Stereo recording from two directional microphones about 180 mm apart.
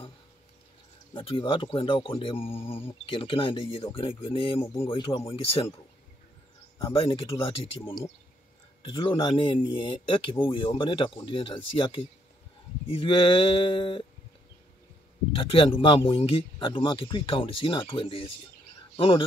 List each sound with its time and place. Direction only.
1.1 s speech: 25° left (ahead or behind)
6.8 s speech: 30° left (ahead or behind)
8.8 s speech: 30° left (ahead or behind)
15.3 s speech: 30° left (ahead or behind)